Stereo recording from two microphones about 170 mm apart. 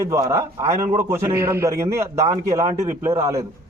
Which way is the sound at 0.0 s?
20° right (ahead or behind).